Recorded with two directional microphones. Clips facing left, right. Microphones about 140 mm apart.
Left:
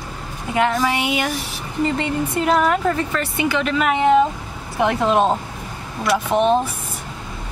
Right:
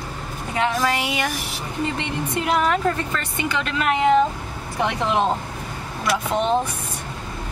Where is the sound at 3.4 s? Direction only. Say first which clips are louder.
Left 3 dB; 5° left (ahead or behind).